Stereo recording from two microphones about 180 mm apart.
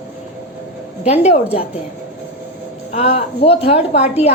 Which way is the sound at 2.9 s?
35° left (ahead or behind).